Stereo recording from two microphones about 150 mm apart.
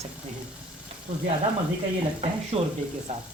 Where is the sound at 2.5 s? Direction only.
40° right (ahead or behind).